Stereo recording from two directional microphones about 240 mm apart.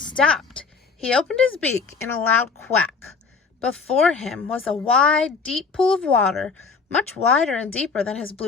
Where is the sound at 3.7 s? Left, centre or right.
Centre.